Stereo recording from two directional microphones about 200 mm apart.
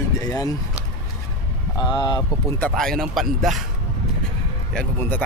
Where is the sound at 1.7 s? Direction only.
20° left (ahead or behind).